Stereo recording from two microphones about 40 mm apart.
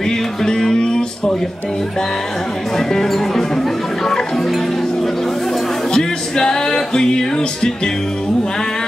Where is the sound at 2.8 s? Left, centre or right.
Centre.